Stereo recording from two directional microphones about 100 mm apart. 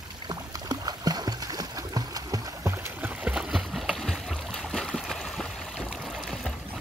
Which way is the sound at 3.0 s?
15° right (ahead or behind).